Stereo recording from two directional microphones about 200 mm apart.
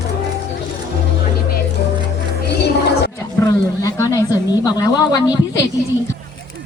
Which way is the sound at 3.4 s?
15° left (ahead or behind).